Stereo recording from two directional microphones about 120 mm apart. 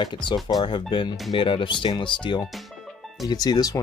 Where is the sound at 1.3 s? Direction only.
45° left (ahead or behind).